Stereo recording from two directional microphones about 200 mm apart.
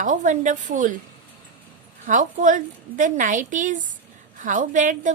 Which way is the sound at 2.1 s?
40° right (ahead or behind).